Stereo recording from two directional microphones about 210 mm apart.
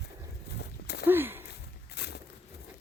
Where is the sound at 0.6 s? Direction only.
50° left (ahead or behind).